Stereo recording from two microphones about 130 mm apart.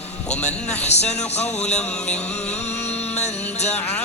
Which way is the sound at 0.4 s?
55° left (ahead or behind).